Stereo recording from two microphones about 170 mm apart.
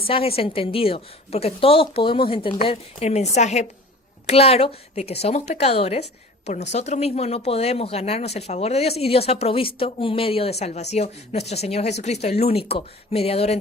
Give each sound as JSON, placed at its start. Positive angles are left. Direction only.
{"t": 0.1, "sound": "a woman's voice", "side_deg": 35}